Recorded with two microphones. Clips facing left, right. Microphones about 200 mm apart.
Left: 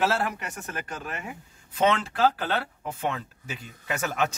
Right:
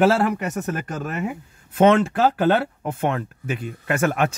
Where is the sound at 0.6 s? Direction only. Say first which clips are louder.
Right 9 dB; 55° right (ahead or behind).